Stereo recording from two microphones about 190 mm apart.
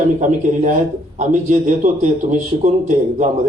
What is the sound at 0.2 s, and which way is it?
A man's voice, 40° right (ahead or behind).